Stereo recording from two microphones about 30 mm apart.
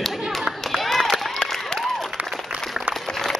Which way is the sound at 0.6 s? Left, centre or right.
Centre.